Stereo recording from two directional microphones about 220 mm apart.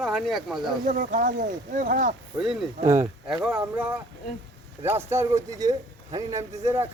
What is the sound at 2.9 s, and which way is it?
A man's voice, 5° right (ahead or behind).